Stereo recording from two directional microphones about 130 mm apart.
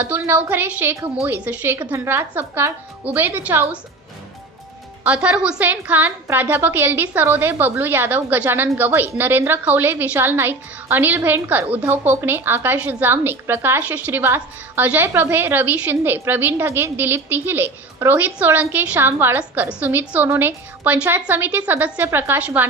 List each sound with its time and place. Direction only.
0.0 s a woman's voice: 15° right (ahead or behind)
5.0 s a woman's voice: 10° right (ahead or behind)